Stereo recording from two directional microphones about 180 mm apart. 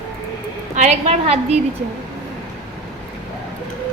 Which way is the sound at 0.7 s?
40° right (ahead or behind).